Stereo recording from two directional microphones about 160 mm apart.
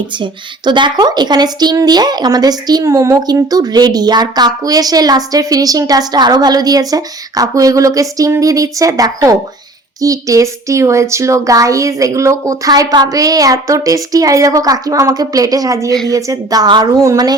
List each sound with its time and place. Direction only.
0.2 s speech: 30° right (ahead or behind)